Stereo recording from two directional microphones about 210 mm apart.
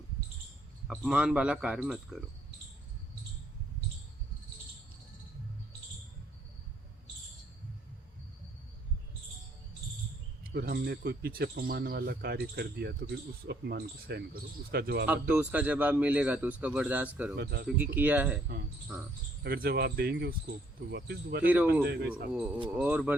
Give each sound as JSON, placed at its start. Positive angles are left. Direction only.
{"t": 0.9, "sound": "a man's voice", "side_deg": -5}
{"t": 10.4, "sound": "speech", "side_deg": -50}
{"t": 15.0, "sound": "a man's voice", "side_deg": -5}
{"t": 17.3, "sound": "speech", "side_deg": -50}
{"t": 17.7, "sound": "a man's voice", "side_deg": -10}
{"t": 19.4, "sound": "speech", "side_deg": -45}
{"t": 21.4, "sound": "a man's voice", "side_deg": -10}
{"t": 21.8, "sound": "speech", "side_deg": -50}
{"t": 22.3, "sound": "a man's voice", "side_deg": -5}